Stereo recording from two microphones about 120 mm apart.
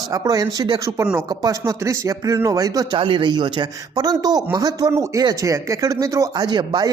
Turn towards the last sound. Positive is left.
turn(degrees=-35)  # may be behind; listen again after turning